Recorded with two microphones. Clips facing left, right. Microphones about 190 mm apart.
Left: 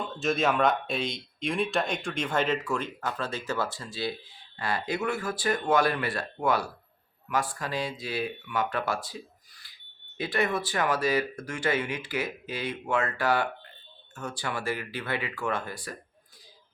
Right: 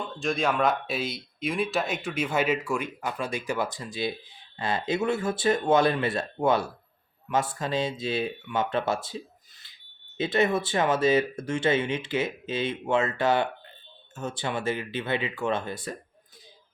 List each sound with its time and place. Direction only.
0.0 s speech: centre (ahead or behind); by 16.0 s 25° right (ahead or behind)